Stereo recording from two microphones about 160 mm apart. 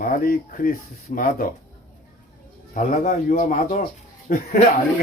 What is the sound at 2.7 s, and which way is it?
Speech, 55° left (ahead or behind).